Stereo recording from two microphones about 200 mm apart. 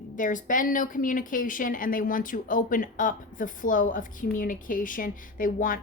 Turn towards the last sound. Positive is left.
turn(degrees=45)  # may be behind; listen again after turning